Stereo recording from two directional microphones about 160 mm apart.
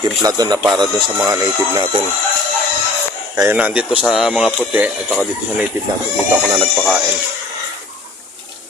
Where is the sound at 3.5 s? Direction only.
10° right (ahead or behind).